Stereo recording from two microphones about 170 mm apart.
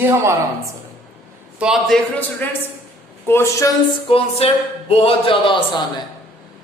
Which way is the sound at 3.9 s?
30° left (ahead or behind).